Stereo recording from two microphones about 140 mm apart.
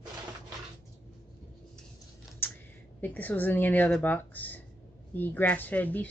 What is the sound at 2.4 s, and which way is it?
Typing, 15° left (ahead or behind).